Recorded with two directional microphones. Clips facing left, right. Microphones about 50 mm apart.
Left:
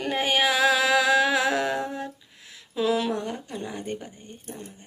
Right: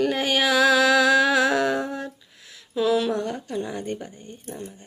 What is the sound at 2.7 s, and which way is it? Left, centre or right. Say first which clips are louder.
Child singing: right 3 dB; left.